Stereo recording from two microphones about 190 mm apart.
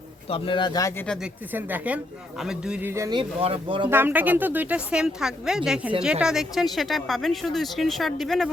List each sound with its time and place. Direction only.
0.3 s speech: 30° left (ahead or behind)
1.0 s speech: 5° left (ahead or behind)
1.5 s speech: 10° right (ahead or behind); by 3.8 s 30° right (ahead or behind)
3.8 s speech: 10° right (ahead or behind)